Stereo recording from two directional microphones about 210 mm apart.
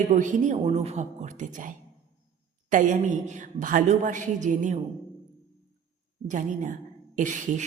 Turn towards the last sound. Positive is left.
turn(degrees=-35)  # may be behind; listen again after turning